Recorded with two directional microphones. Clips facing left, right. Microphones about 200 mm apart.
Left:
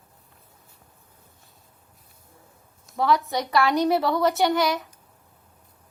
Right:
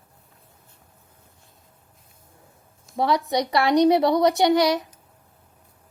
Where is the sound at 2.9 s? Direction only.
20° right (ahead or behind).